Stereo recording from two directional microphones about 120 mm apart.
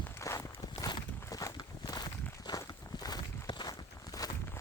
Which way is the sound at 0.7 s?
40° left (ahead or behind).